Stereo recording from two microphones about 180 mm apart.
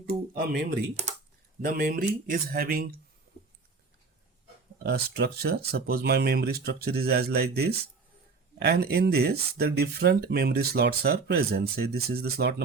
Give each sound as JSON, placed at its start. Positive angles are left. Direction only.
{"t": 0.0, "sound": "a sound", "side_deg": -55}
{"t": 1.6, "sound": "speech", "side_deg": -55}
{"t": 4.8, "sound": "speech", "side_deg": -65}